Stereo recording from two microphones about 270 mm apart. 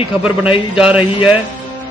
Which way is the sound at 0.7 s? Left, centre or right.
Centre.